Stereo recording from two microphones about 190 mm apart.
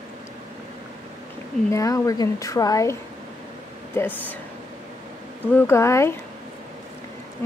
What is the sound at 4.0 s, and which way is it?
Speech, 15° left (ahead or behind).